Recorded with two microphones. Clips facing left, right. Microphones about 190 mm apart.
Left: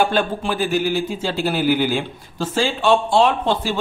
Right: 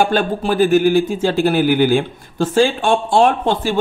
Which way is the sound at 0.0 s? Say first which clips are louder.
Right 3 dB; 40° right (ahead or behind).